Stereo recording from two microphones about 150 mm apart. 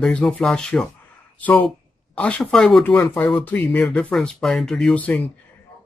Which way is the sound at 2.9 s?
15° left (ahead or behind).